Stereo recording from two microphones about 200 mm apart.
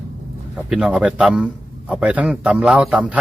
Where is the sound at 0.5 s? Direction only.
5° right (ahead or behind).